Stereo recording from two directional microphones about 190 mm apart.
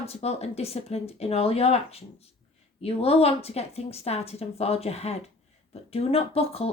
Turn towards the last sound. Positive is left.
turn(degrees=30)  # may be behind; listen again after turning